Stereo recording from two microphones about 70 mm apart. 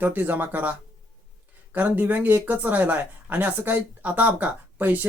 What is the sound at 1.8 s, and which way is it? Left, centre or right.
Speech, right.